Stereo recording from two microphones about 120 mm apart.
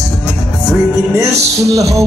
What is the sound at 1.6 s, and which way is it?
Music, 30° right (ahead or behind).